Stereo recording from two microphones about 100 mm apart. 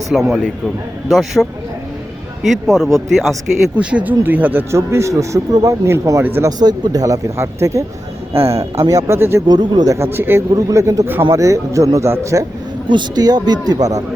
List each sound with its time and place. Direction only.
0.1 s speech: centre (ahead or behind)
3.8 s speech: 10° right (ahead or behind)
6.6 s speech: 40° right (ahead or behind); by 9.4 s 25° right (ahead or behind)
9.5 s speech: 45° right (ahead or behind)
9.9 s speech: 25° right (ahead or behind)
10.5 s speech: 35° right (ahead or behind)
12.9 s speech: 45° right (ahead or behind)